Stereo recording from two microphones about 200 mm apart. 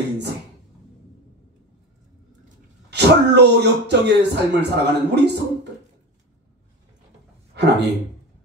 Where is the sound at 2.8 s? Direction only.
55° right (ahead or behind).